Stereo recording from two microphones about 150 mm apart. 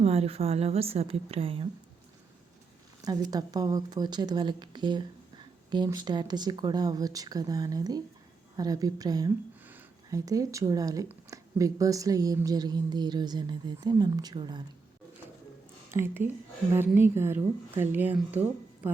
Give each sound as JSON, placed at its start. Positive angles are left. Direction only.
{"t": 0.0, "sound": "a woman's voice", "side_deg": -45}
{"t": 3.0, "sound": "speech", "side_deg": -25}
{"t": 15.9, "sound": "speech", "side_deg": -15}